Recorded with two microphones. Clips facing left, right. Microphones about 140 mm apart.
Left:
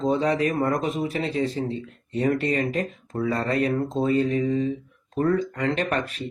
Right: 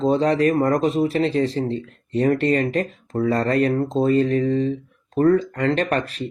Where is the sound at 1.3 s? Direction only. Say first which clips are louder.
Right 4 dB; 90° right.